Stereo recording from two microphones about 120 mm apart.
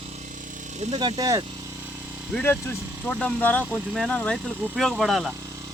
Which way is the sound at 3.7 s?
5° left (ahead or behind).